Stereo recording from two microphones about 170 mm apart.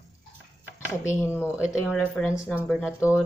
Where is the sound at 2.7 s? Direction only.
Centre (ahead or behind).